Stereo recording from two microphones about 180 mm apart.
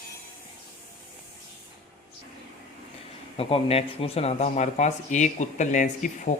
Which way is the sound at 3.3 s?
35° left (ahead or behind).